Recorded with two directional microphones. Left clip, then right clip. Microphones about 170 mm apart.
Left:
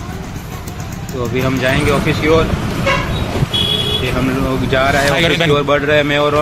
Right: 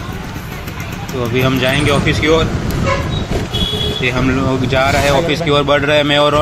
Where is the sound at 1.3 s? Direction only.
20° right (ahead or behind).